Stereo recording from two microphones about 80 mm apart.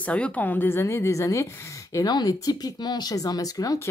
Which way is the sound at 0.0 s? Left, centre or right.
Centre.